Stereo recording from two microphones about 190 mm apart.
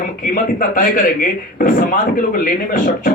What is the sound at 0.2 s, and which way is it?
Speech, 45° left (ahead or behind).